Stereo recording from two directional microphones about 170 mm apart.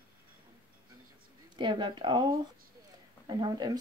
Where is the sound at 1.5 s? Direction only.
25° right (ahead or behind).